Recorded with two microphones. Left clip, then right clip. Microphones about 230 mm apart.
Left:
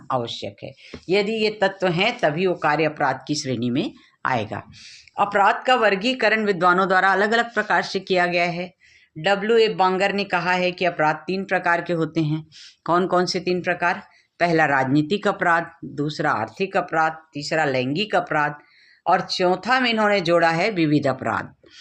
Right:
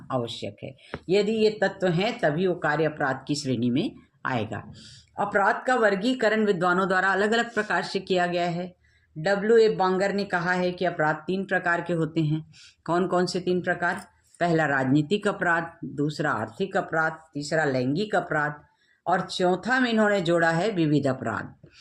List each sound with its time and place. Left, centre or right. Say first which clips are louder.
0.1 s speech: left 5 dB; left